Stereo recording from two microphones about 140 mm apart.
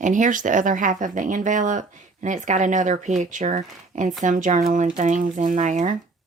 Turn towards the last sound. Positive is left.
turn(degrees=-60)  # may be behind; listen again after turning